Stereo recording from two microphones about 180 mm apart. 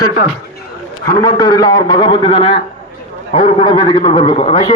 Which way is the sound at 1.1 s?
20° left (ahead or behind).